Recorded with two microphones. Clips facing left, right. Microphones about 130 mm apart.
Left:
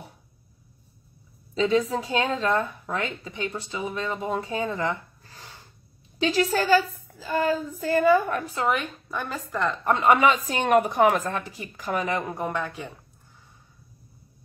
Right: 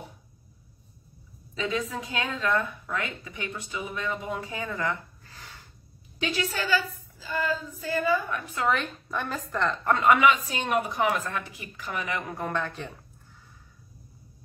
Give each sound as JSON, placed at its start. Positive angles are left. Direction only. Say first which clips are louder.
{"t": 1.5, "sound": "a woman's voice", "louder": "left 8 dB", "side_deg": 30}
{"t": 8.6, "sound": "a woman's voice", "louder": "even", "side_deg": 15}
{"t": 8.9, "sound": "a woman's voice", "louder": "even", "side_deg": 0}
{"t": 9.8, "sound": "a woman's voice", "louder": "left 1 dB", "side_deg": 25}
{"t": 10.5, "sound": "speech", "louder": "left 7 dB", "side_deg": 55}
{"t": 12.4, "sound": "a woman's voice", "louder": "left 2 dB", "side_deg": 15}